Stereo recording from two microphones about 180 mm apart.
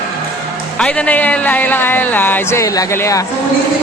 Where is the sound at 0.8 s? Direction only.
5° left (ahead or behind).